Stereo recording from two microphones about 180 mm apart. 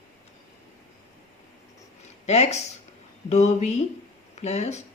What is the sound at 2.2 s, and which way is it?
Speech, 35° left (ahead or behind).